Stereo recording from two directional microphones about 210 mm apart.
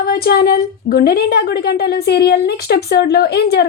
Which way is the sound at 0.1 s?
50° left (ahead or behind).